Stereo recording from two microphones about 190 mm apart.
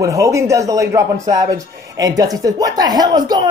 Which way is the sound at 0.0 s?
15° right (ahead or behind).